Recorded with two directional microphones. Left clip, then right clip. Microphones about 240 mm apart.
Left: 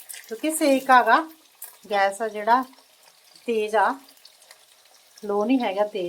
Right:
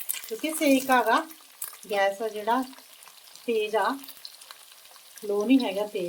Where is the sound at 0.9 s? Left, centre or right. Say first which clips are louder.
Left 6 dB; centre.